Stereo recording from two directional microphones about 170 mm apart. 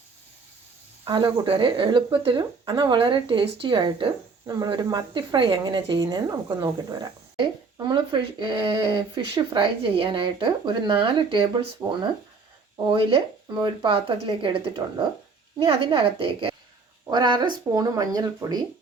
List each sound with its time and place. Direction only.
1.0 s speech: 25° right (ahead or behind)